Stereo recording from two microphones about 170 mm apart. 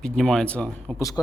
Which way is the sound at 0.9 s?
20° left (ahead or behind).